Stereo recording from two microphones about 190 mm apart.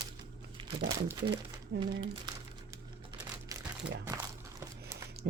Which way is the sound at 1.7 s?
70° right (ahead or behind).